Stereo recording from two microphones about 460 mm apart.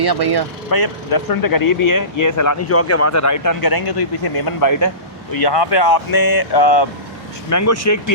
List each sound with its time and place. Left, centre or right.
0.0 s speech: right
0.7 s speech: left
5.3 s speech: left
7.5 s speech: left